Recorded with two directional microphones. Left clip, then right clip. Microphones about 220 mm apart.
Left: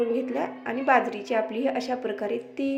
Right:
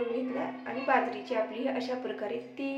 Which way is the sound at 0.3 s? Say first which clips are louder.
Left 6 dB; 35° left (ahead or behind).